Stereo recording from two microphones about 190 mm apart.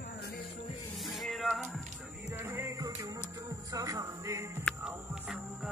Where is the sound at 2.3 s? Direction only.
10° right (ahead or behind).